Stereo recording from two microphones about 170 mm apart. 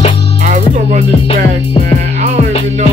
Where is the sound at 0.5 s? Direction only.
50° right (ahead or behind).